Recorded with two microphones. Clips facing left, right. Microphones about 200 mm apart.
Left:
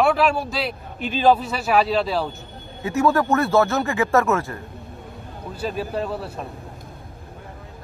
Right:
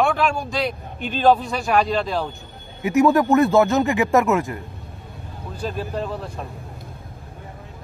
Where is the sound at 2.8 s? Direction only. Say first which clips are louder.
Right 3 dB; 15° right (ahead or behind).